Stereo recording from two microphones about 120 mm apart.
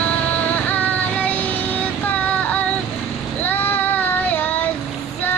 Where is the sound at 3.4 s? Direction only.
15° left (ahead or behind).